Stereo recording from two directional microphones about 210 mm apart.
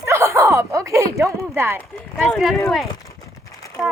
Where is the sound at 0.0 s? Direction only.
15° right (ahead or behind).